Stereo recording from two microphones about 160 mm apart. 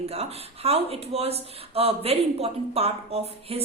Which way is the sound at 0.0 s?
40° right (ahead or behind).